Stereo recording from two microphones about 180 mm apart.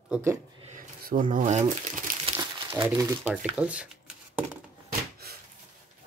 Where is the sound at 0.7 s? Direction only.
50° right (ahead or behind).